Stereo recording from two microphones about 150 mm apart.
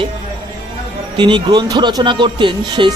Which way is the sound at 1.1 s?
30° right (ahead or behind).